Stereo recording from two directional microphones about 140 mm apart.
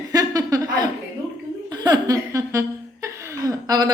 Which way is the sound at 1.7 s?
30° right (ahead or behind).